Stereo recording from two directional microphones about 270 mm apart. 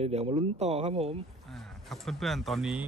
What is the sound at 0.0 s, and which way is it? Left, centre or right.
Speech, right.